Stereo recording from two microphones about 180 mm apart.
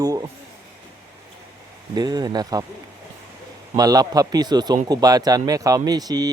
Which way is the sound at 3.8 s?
20° right (ahead or behind).